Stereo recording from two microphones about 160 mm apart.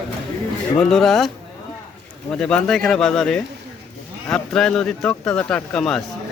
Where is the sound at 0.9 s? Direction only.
Centre (ahead or behind).